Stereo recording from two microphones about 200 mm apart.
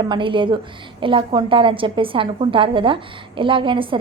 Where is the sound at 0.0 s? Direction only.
25° right (ahead or behind).